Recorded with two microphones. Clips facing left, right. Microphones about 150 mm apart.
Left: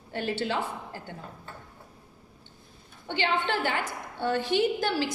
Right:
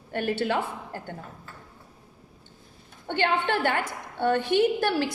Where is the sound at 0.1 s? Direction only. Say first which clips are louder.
Right 3 dB; 55° right (ahead or behind).